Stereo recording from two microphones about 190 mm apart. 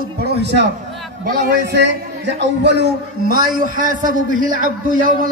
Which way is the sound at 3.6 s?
45° right (ahead or behind).